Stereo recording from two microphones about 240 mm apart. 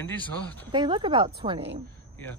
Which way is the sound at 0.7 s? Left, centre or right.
Centre.